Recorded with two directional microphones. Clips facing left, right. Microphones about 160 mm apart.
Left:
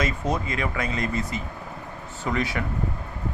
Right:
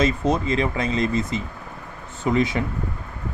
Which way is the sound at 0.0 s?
25° right (ahead or behind).